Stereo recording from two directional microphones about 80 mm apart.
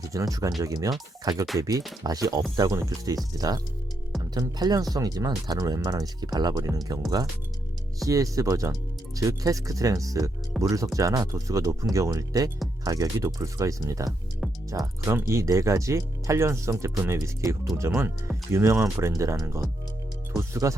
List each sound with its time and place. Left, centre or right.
0.1 s speech: right
8.0 s speech: right